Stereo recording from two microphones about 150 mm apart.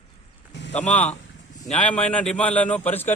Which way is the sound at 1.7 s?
10° left (ahead or behind).